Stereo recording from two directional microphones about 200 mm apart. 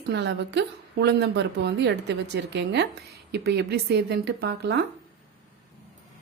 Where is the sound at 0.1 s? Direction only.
60° right (ahead or behind).